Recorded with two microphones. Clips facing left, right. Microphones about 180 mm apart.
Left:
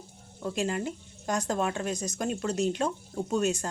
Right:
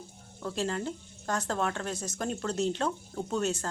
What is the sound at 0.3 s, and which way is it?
Speech, 15° left (ahead or behind).